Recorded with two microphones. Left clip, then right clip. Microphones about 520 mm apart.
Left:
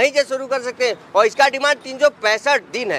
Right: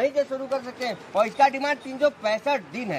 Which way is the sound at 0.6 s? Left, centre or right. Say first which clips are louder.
Left 10 dB; left.